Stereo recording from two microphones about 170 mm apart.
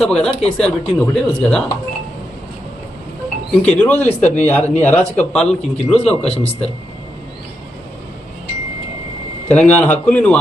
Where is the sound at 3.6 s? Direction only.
10° left (ahead or behind).